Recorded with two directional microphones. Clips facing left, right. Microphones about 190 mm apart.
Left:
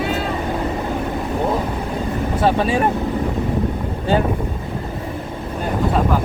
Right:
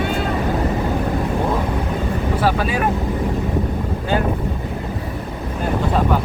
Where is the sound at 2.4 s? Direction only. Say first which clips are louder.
Left 4 dB; 25° left (ahead or behind).